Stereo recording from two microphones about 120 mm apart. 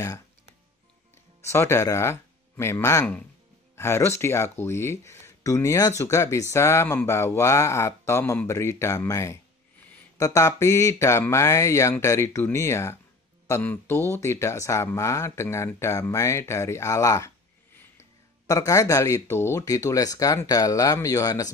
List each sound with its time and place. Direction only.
1.4 s speech: 25° left (ahead or behind)
18.5 s speech: 25° left (ahead or behind)